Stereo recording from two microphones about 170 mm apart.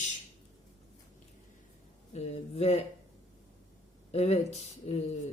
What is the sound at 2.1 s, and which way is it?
Speech, 40° left (ahead or behind).